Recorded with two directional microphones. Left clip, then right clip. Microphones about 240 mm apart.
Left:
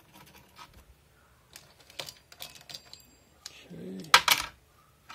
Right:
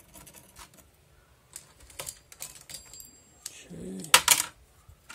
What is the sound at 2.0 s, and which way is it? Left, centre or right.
Typing, centre.